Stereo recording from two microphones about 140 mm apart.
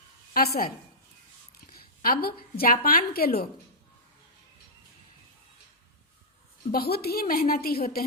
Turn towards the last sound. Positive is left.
turn(degrees=90)